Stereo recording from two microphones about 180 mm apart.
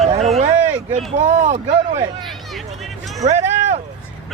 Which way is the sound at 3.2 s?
50° right (ahead or behind).